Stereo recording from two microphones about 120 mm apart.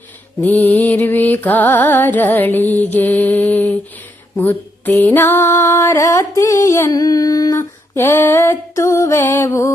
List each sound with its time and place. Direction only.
0.4 s music: 15° left (ahead or behind)
4.4 s female singing: 15° left (ahead or behind)